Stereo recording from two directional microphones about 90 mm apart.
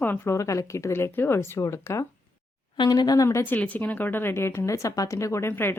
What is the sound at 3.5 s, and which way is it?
Speech, 15° left (ahead or behind).